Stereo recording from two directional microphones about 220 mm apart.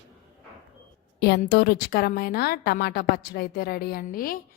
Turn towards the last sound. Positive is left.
turn(degrees=40)  # may be behind; listen again after turning